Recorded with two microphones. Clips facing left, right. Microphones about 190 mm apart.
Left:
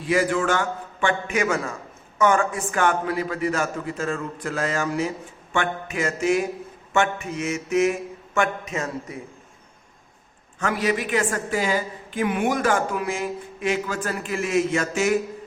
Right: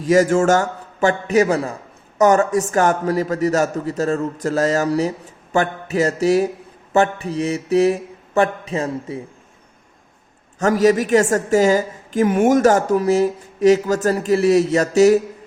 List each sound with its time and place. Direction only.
0.0 s a woman's voice: 40° right (ahead or behind)
10.6 s a woman's voice: 40° right (ahead or behind)